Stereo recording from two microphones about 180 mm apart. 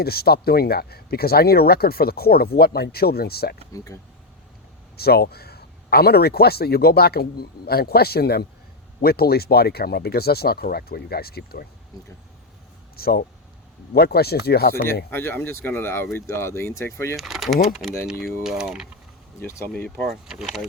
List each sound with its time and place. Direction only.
0.0 s speech: 60° left (ahead or behind)
3.7 s speech: 20° left (ahead or behind)
4.9 s speech: 60° left (ahead or behind)
13.0 s speech: 60° left (ahead or behind)
15.1 s speech: 10° left (ahead or behind)
17.2 s speech: centre (ahead or behind)
19.4 s speech: 15° left (ahead or behind)
19.7 s speech: centre (ahead or behind)